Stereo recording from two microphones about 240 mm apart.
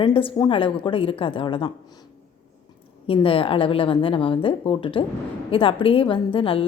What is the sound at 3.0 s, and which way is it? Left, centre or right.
A woman's voice, left.